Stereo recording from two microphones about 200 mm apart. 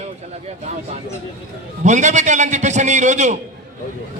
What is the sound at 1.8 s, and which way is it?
A man's voice, 35° right (ahead or behind).